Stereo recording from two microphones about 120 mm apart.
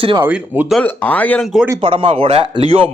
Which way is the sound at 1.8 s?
45° right (ahead or behind).